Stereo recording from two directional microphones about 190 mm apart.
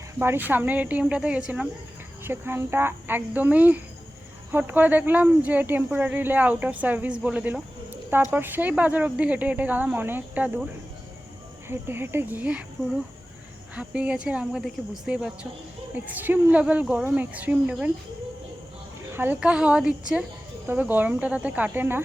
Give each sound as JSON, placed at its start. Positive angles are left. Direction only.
{"t": 0.2, "sound": "speech", "side_deg": -10}
{"t": 11.7, "sound": "speech", "side_deg": -10}
{"t": 13.7, "sound": "speech", "side_deg": -5}
{"t": 19.1, "sound": "speech", "side_deg": -10}